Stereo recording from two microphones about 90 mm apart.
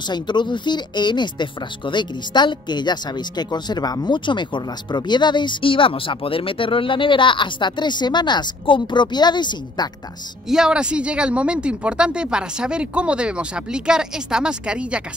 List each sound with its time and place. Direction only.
0.1 s speech: 55° left (ahead or behind)
10.5 s speech: 10° right (ahead or behind)